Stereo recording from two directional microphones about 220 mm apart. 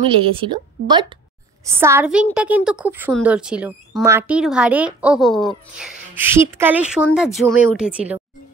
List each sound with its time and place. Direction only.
0.0 s speech: 25° right (ahead or behind); by 5.5 s centre (ahead or behind)
5.8 s speech: 10° right (ahead or behind)